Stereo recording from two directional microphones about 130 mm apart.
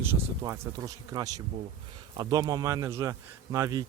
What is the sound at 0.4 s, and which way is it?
A man's voice, 25° right (ahead or behind).